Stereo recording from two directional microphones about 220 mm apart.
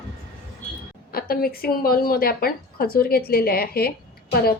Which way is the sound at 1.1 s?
45° left (ahead or behind).